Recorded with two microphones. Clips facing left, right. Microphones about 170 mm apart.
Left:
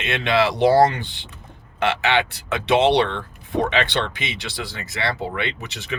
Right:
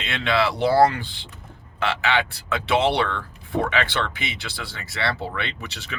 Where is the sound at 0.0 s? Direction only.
20° left (ahead or behind).